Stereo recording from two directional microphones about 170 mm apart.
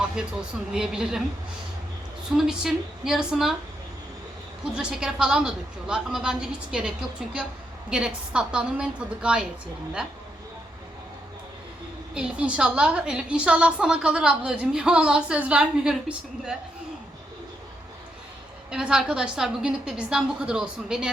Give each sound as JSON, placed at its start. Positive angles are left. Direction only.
{"t": 0.2, "sound": "a woman's voice", "side_deg": -5}
{"t": 2.3, "sound": "a woman's voice", "side_deg": -5}
{"t": 4.7, "sound": "a woman's voice", "side_deg": -5}
{"t": 12.1, "sound": "a woman's voice", "side_deg": -5}
{"t": 18.7, "sound": "a woman's voice", "side_deg": -5}